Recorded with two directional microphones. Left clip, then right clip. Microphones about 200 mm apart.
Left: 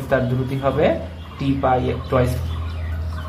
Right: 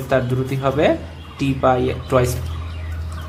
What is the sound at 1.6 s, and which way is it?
Speech, 40° right (ahead or behind).